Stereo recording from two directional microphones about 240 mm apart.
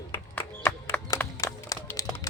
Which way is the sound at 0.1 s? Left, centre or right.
Centre.